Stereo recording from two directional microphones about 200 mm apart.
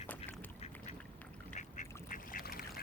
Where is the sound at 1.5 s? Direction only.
40° left (ahead or behind).